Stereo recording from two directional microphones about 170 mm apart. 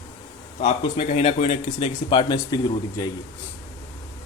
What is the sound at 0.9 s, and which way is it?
Speech, 35° left (ahead or behind).